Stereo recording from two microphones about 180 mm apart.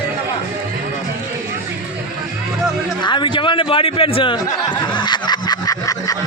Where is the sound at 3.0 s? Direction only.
25° left (ahead or behind).